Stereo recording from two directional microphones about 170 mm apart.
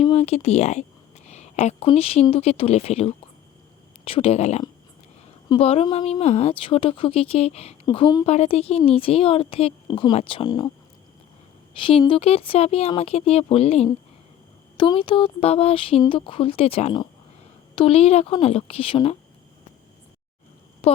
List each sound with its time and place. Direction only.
0.0 s a sound: 35° left (ahead or behind)
1.9 s a woman's voice: 35° left (ahead or behind)
7.9 s a woman's voice: 25° left (ahead or behind)
11.8 s a woman's voice: 30° left (ahead or behind)
20.8 s speech: 35° left (ahead or behind)